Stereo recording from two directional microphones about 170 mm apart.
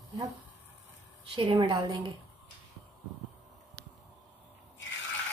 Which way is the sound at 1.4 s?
25° right (ahead or behind).